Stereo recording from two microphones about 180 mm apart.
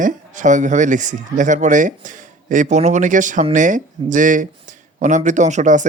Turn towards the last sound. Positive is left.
turn(degrees=-45)  # may be behind; listen again after turning